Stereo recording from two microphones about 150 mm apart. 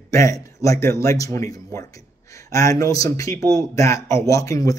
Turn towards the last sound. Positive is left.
turn(degrees=20)  # may be behind; listen again after turning